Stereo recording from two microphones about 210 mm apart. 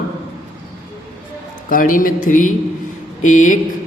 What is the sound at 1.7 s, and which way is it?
A man's voice, 40° left (ahead or behind).